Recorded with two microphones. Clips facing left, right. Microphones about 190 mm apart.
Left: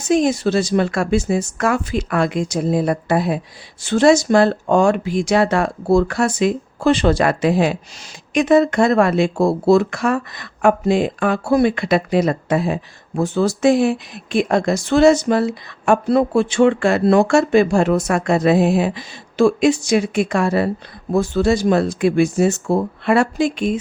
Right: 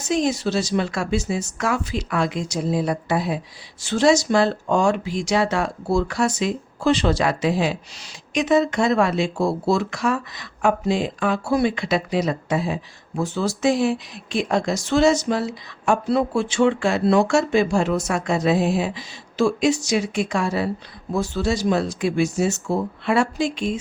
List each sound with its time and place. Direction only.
0.1 s speech: 55° left (ahead or behind)